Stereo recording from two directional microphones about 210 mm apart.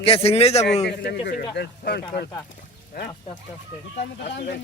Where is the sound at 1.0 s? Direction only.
45° left (ahead or behind).